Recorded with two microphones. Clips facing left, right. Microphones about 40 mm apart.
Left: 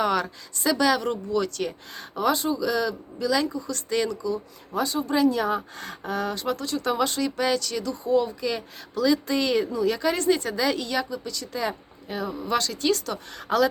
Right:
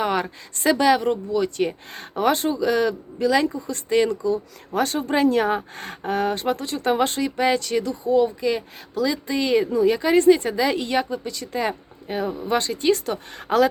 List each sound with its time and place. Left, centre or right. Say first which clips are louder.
0.0 s a sound: right 1 dB; right
0.5 s speech: right 5 dB; right
0.8 s speech: right 4 dB; right
1.9 s speech: right 1 dB; right
4.7 s speech: right 3 dB; right
7.2 s speech: right 3 dB; right
8.0 s speech: right 3 dB; centre
8.4 s speech: right 5 dB; centre; by 13.7 s right